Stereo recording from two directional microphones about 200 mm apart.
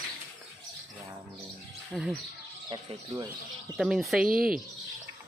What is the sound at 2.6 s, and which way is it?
Speech, 25° right (ahead or behind).